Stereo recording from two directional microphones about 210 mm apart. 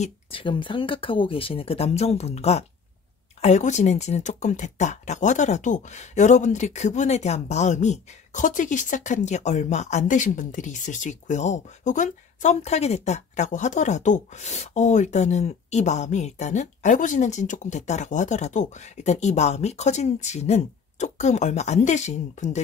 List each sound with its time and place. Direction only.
0.0 s speech: 25° left (ahead or behind)